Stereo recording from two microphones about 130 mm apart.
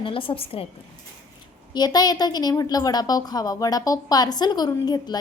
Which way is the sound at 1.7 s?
30° left (ahead or behind).